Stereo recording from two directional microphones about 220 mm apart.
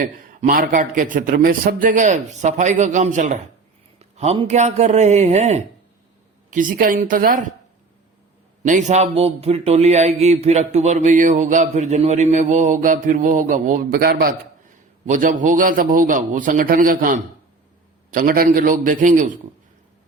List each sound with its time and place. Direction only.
0.0 s speech: 40° right (ahead or behind)
8.6 s speech: 35° right (ahead or behind)